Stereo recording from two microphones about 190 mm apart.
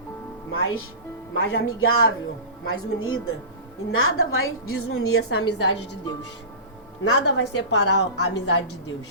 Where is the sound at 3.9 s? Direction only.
90° left.